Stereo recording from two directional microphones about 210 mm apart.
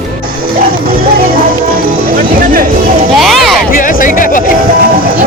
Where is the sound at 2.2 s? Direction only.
45° right (ahead or behind).